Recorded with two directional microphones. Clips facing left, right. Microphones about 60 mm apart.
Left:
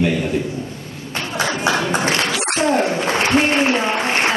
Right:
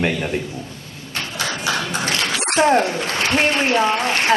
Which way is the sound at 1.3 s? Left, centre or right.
Left.